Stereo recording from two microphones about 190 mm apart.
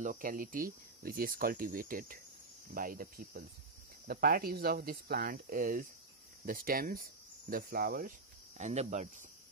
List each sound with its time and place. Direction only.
0.0 s speech: 45° right (ahead or behind)
8.5 s speech: 35° right (ahead or behind)